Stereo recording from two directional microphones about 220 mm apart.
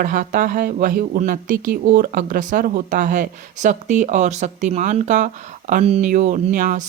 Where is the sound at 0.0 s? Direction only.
35° right (ahead or behind).